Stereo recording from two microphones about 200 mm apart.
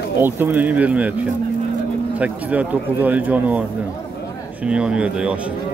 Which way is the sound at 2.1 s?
5° right (ahead or behind).